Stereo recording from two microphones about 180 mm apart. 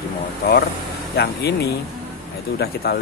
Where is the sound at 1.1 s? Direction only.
65° left (ahead or behind).